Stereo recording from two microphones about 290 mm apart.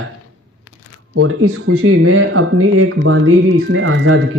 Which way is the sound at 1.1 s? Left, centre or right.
Right.